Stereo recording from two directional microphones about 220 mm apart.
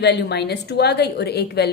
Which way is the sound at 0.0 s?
50° left (ahead or behind).